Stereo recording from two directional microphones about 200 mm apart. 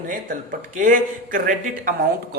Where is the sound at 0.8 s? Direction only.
40° right (ahead or behind).